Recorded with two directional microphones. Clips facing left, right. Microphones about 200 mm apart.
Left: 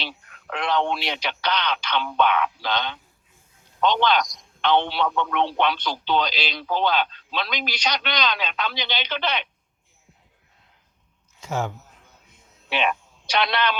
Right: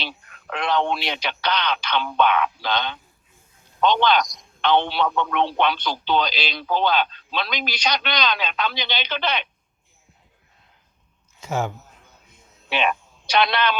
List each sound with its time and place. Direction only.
0.5 s speech: 55° right (ahead or behind)
11.3 s speech: 5° right (ahead or behind)
12.7 s a man's voice: 60° right (ahead or behind)